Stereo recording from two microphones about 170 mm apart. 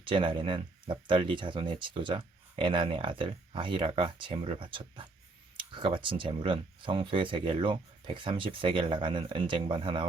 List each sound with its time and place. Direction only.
0.0 s speech: 30° right (ahead or behind)